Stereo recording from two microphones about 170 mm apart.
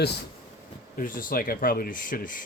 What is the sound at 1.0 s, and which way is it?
Speech, 55° left (ahead or behind).